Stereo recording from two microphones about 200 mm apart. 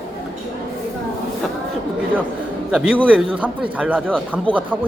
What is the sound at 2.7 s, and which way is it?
A man's voice, 5° right (ahead or behind).